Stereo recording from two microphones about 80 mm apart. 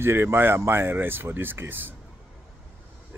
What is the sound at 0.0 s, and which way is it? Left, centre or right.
Speech, right.